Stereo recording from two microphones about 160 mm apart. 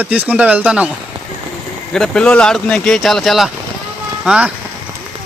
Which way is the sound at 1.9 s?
5° left (ahead or behind).